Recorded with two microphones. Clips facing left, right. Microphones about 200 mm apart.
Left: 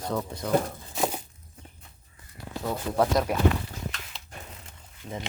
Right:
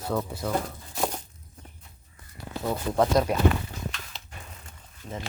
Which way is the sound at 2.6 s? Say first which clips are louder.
Right 1 dB; centre (ahead or behind).